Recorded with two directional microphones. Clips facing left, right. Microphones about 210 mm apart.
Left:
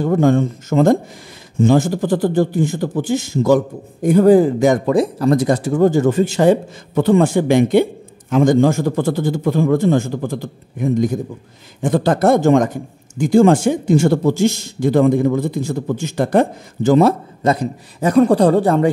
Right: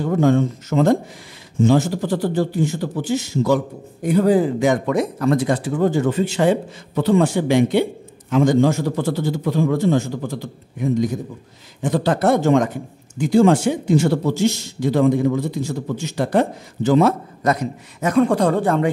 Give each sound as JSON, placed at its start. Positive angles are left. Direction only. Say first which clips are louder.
{"t": 0.0, "sound": "speech", "louder": "left 2 dB", "side_deg": 50}
{"t": 17.4, "sound": "a man's voice", "louder": "left 3 dB", "side_deg": 30}